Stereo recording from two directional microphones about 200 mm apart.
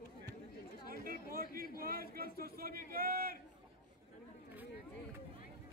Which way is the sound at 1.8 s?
45° right (ahead or behind).